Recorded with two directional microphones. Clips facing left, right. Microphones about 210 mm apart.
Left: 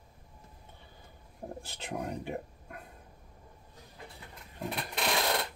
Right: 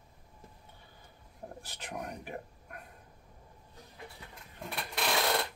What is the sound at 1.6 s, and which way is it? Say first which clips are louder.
Speech: left 4 dB; 25° left (ahead or behind).